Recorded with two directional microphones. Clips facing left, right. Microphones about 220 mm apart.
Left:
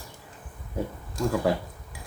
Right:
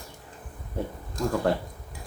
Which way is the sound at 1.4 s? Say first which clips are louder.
Even; 5° left (ahead or behind).